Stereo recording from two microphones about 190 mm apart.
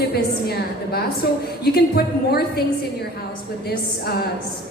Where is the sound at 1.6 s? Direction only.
55° left (ahead or behind).